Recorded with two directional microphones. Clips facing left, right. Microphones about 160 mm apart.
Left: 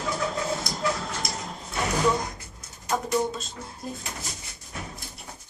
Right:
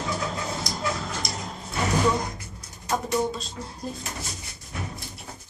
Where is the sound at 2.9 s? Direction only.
Centre (ahead or behind).